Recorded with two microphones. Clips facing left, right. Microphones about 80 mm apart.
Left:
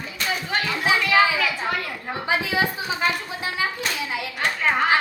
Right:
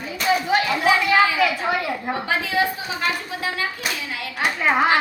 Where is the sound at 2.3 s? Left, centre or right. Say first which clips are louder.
Even; centre.